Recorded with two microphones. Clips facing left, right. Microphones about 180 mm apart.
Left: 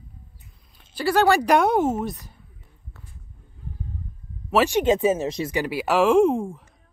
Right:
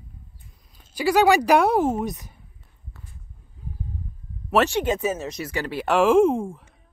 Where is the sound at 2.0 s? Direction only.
20° right (ahead or behind).